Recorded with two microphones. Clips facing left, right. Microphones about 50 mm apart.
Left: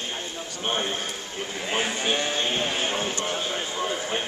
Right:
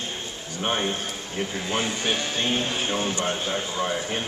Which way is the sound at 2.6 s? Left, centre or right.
Centre.